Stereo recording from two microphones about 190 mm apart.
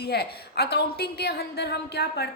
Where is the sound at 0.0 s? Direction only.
60° left (ahead or behind).